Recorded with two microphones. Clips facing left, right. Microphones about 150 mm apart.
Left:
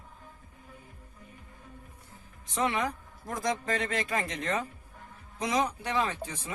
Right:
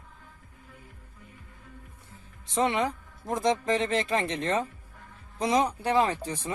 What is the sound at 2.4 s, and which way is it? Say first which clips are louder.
A man's voice: right 4 dB; 25° right (ahead or behind).